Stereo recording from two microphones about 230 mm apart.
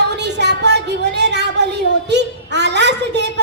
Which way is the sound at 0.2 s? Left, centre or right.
Right.